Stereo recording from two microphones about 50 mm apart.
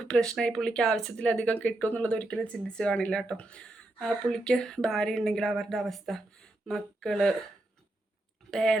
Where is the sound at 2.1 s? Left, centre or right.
Left.